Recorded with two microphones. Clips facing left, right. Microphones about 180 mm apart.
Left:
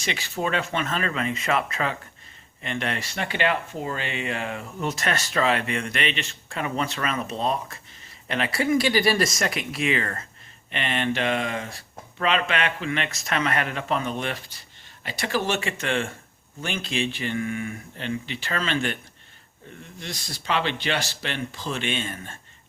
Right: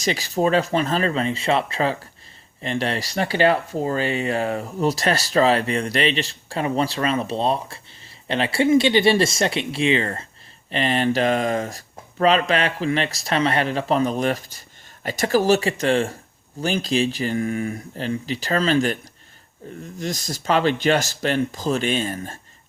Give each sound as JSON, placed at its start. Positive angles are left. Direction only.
{"t": 0.0, "sound": "speech", "side_deg": -40}